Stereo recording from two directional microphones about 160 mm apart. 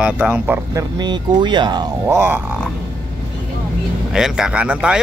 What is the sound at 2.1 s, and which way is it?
Speech, 15° right (ahead or behind).